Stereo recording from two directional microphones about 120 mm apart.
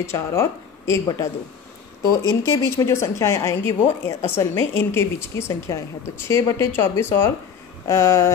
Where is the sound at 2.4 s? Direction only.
20° left (ahead or behind).